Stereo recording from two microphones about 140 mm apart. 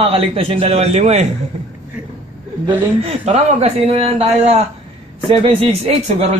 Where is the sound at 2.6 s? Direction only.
50° right (ahead or behind).